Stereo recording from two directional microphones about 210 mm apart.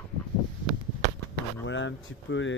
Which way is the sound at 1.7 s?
60° left (ahead or behind).